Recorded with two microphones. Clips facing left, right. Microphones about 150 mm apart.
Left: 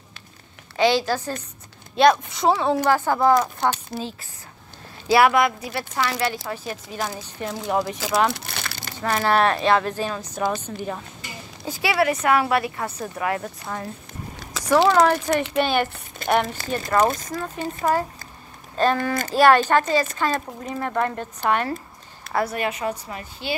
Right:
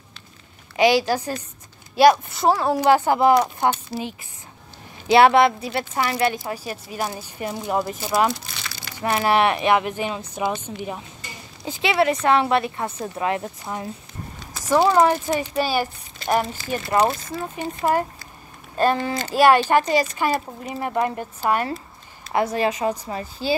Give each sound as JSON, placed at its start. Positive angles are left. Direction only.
{"t": 0.7, "sound": "a woman's voice", "side_deg": -15}
{"t": 2.8, "sound": "speech", "side_deg": -15}
{"t": 6.4, "sound": "a woman's voice", "side_deg": -10}
{"t": 8.5, "sound": "crumpling", "side_deg": 60}
{"t": 9.0, "sound": "speech", "side_deg": -15}
{"t": 11.6, "sound": "a woman's voice", "side_deg": -20}
{"t": 16.2, "sound": "speech", "side_deg": 50}
{"t": 16.6, "sound": "speech", "side_deg": 60}
{"t": 16.9, "sound": "speech", "side_deg": -15}
{"t": 22.5, "sound": "speech", "side_deg": -30}